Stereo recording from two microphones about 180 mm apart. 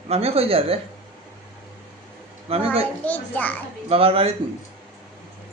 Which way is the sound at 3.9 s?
30° right (ahead or behind).